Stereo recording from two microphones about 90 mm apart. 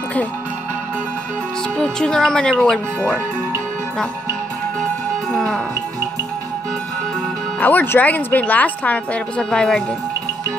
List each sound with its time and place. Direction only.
1.8 s speech: 5° left (ahead or behind)
5.3 s music: centre (ahead or behind)
7.6 s speech: 20° left (ahead or behind)